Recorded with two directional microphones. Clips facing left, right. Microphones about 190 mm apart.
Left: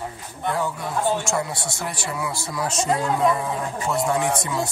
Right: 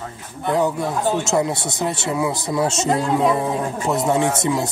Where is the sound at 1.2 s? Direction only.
20° right (ahead or behind).